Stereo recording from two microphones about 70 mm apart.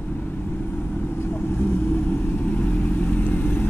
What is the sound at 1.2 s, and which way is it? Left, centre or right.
Vehicle, left.